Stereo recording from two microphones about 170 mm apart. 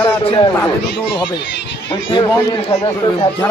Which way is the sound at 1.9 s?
30° left (ahead or behind).